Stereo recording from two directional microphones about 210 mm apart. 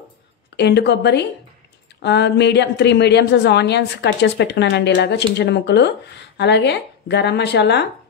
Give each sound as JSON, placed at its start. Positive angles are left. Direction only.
{"t": 0.6, "sound": "a woman's voice", "side_deg": 55}